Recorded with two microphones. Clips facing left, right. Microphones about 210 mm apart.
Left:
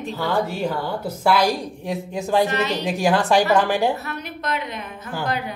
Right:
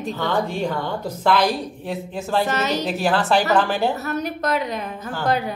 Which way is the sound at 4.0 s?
40° right (ahead or behind).